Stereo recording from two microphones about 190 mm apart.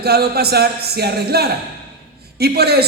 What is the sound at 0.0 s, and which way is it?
Speech, 55° right (ahead or behind).